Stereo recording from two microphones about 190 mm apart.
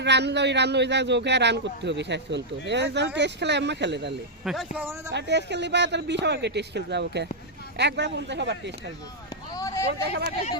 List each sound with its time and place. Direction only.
0.0 s a man's voice: 65° right (ahead or behind)
4.4 s speech: 5° right (ahead or behind)
5.1 s a man's voice: 65° right (ahead or behind)
9.5 s a sound: 20° left (ahead or behind)